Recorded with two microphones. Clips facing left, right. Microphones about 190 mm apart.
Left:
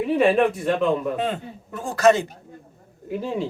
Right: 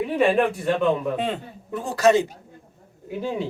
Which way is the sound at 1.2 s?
45° left (ahead or behind).